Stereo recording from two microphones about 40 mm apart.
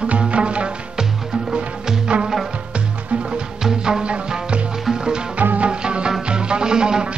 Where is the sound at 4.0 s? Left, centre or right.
Right.